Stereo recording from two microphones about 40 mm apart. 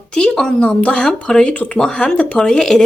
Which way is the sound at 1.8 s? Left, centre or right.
Centre.